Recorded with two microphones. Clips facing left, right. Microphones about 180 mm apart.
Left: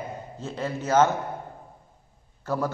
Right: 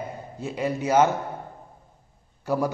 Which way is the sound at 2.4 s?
10° right (ahead or behind).